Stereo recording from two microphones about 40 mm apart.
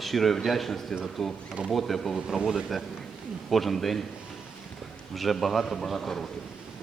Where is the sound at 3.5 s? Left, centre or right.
Centre.